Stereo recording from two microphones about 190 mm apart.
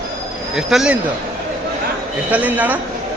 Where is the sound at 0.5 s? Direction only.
5° right (ahead or behind).